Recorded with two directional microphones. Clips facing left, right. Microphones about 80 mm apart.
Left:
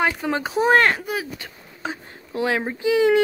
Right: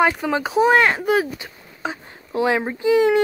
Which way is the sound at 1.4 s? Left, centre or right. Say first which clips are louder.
Right 3 dB; right.